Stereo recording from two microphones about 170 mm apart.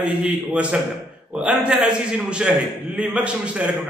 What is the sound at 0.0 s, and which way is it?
A man's voice, 5° right (ahead or behind).